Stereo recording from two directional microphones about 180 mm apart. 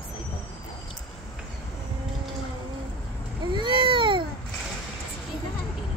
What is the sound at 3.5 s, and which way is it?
Baby cry, 25° right (ahead or behind).